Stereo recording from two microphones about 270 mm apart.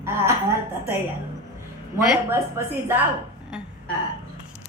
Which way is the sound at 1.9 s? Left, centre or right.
Centre.